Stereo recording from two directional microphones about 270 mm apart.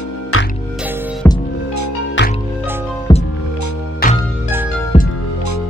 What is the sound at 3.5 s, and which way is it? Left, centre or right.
Music, left.